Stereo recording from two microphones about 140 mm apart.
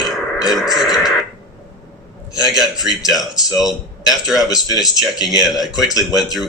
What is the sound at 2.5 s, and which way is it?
Speech, centre (ahead or behind).